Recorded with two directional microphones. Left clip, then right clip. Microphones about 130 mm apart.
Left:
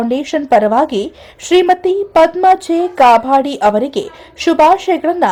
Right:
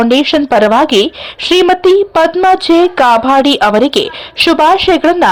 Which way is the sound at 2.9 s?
40° right (ahead or behind).